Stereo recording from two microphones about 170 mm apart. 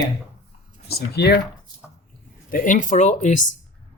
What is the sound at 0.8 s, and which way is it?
Speech, 70° left (ahead or behind).